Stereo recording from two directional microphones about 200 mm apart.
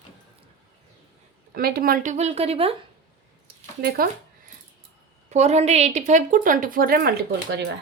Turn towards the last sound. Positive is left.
turn(degrees=-60)  # may be behind; listen again after turning